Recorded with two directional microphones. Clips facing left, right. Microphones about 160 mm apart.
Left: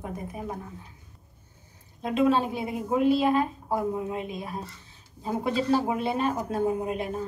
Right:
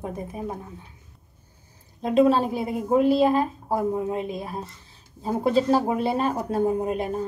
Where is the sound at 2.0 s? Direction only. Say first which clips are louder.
Right 4 dB; 35° right (ahead or behind).